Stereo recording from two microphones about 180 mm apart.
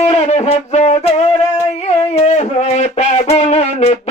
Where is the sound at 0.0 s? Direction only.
40° left (ahead or behind).